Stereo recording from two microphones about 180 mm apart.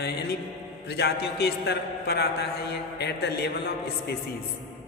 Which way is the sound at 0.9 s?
65° left (ahead or behind).